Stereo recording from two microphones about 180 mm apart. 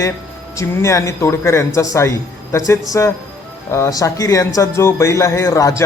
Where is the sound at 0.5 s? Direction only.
15° left (ahead or behind).